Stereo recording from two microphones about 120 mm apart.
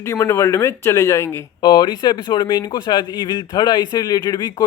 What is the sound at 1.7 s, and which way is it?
Speech, 35° left (ahead or behind).